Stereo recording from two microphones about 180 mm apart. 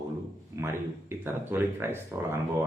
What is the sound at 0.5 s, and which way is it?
Speech, 15° right (ahead or behind).